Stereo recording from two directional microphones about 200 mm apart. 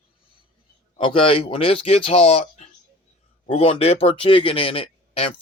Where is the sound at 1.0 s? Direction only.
25° left (ahead or behind).